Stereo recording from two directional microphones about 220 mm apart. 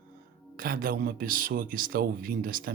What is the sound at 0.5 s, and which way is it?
Speech, 40° right (ahead or behind).